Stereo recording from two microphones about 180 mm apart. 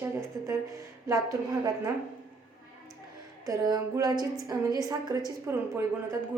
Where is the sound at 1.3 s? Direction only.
20° right (ahead or behind).